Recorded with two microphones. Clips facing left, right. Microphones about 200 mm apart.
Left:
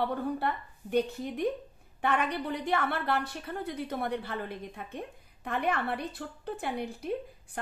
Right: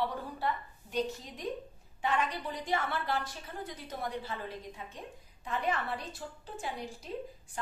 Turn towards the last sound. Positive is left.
turn(degrees=60)  # may be behind; listen again after turning